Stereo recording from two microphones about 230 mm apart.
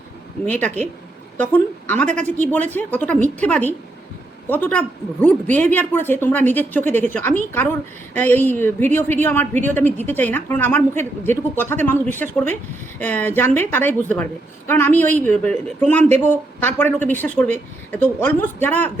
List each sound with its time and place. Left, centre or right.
0.4 s a woman's voice: centre